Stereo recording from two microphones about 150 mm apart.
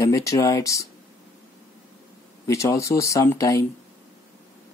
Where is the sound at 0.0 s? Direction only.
20° left (ahead or behind).